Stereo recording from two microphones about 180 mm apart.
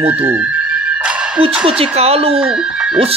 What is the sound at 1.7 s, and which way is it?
Music, 35° right (ahead or behind).